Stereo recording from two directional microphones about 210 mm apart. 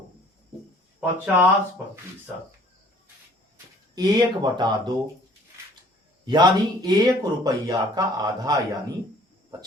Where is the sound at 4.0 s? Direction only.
20° right (ahead or behind).